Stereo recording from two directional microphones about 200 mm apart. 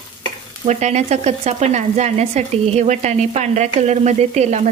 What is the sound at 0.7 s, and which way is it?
Speech, 35° right (ahead or behind).